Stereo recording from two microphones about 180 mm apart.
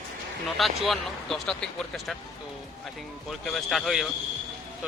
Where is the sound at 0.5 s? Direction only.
Centre (ahead or behind).